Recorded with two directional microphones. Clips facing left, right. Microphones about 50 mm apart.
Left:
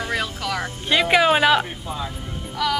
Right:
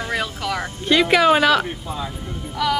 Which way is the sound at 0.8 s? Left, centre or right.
Centre.